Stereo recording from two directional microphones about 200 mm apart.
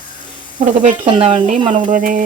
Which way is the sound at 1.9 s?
40° right (ahead or behind).